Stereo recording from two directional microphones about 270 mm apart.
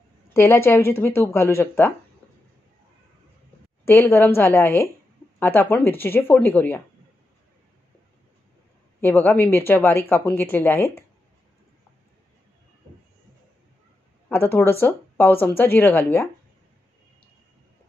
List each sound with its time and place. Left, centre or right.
0.3 s a woman's voice: centre
3.8 s a woman's voice: centre
9.0 s a woman's voice: centre
14.3 s a woman's voice: centre